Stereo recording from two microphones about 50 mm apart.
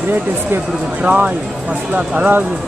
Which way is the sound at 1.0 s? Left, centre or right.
Right.